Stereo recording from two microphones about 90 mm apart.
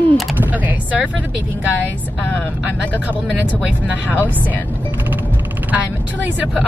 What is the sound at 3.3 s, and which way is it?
Speech, 15° right (ahead or behind).